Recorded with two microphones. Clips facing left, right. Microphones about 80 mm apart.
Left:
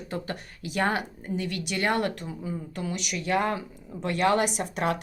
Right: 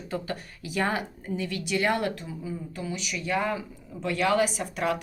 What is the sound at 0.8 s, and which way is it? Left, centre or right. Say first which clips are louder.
Speech: left 2 dB; left.